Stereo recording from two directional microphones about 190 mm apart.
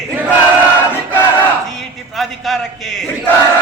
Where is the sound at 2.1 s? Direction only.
Centre (ahead or behind).